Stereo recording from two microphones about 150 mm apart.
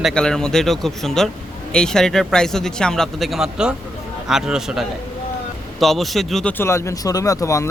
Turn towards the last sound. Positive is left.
turn(degrees=20)  # may be behind; listen again after turning